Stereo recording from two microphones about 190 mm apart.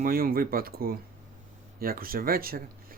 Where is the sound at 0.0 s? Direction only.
50° right (ahead or behind).